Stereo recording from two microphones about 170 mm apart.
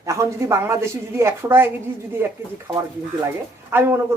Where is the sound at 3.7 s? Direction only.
15° right (ahead or behind).